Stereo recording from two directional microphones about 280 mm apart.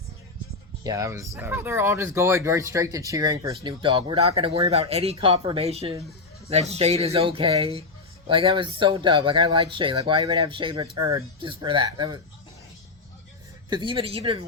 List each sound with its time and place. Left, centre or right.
0.9 s speech: centre
13.7 s speech: centre